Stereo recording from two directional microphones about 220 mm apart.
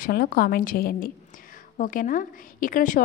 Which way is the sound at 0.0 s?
40° left (ahead or behind).